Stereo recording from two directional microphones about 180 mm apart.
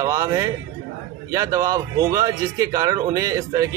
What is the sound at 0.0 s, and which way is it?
A man's voice, 15° right (ahead or behind).